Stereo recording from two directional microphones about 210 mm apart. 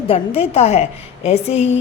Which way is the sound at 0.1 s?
30° left (ahead or behind).